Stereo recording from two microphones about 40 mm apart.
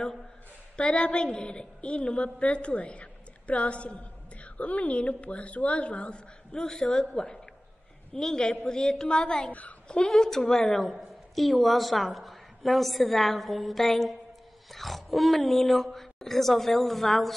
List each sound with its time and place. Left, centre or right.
0.7 s a woman's voice: left
9.5 s a woman's voice: left
9.8 s a woman's voice: left
10.6 s a woman's voice: centre